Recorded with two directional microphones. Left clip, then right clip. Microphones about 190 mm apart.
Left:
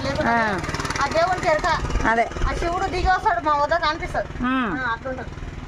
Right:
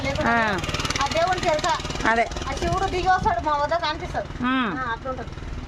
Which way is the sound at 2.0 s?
5° left (ahead or behind).